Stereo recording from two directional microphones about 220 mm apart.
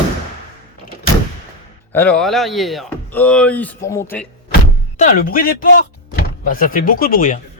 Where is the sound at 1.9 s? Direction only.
5° left (ahead or behind).